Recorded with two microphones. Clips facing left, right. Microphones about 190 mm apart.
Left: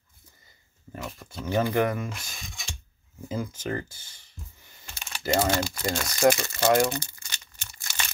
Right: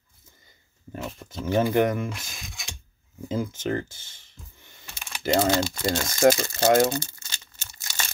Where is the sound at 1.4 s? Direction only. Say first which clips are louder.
Right 3 dB; 25° right (ahead or behind).